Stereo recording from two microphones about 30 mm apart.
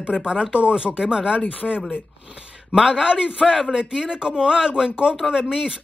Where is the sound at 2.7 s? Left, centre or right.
Right.